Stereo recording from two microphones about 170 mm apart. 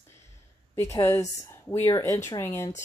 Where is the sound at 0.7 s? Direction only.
15° left (ahead or behind).